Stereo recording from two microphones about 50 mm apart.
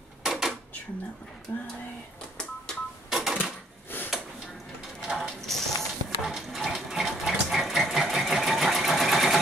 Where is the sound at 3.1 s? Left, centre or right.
Centre.